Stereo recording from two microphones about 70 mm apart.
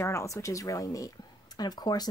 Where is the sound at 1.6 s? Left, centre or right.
Left.